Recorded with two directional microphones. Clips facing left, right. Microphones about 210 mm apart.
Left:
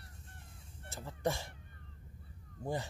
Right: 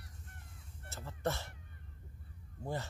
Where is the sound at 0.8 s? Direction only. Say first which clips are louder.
Left 2 dB; 15° left (ahead or behind).